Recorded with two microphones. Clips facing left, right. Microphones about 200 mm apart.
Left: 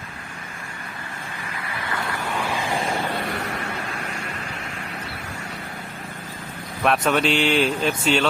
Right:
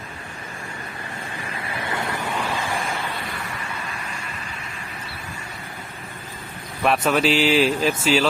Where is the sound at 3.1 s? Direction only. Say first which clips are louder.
Left 5 dB; 60° left (ahead or behind).